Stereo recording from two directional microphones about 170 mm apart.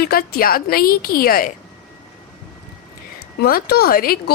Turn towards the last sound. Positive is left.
turn(degrees=60)  # may be behind; listen again after turning